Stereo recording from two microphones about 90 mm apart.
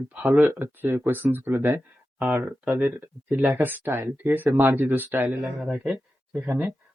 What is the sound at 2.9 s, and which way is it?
Speech, 25° right (ahead or behind).